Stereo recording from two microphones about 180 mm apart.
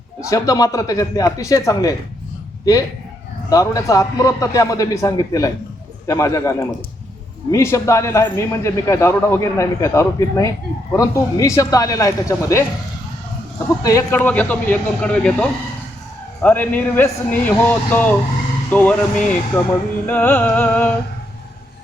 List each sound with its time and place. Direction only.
0.2 s a man's voice: 20° left (ahead or behind)
3.5 s a man's voice: 20° left (ahead or behind)
13.8 s a man's voice: 15° left (ahead or behind)